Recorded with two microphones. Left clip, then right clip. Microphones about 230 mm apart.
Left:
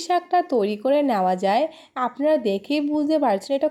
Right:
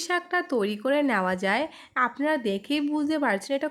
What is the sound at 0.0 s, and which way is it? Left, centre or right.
Speech, centre.